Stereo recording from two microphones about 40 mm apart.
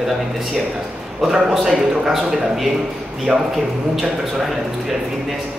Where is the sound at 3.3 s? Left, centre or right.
Centre.